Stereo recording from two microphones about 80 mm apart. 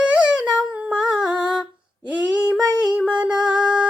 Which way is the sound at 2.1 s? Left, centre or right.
Centre.